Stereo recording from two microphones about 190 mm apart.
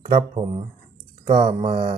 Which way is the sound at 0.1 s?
25° right (ahead or behind).